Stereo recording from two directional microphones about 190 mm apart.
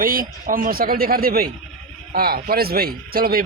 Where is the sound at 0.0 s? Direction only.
50° right (ahead or behind).